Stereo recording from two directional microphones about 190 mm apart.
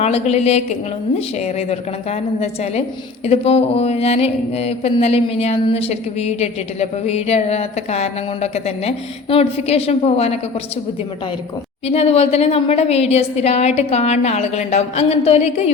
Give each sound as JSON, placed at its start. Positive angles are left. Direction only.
{"t": 0.0, "sound": "mantra", "side_deg": 35}
{"t": 11.9, "sound": "mantra", "side_deg": 30}